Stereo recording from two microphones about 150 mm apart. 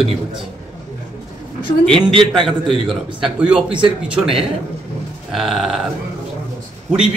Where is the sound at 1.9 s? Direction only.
35° right (ahead or behind).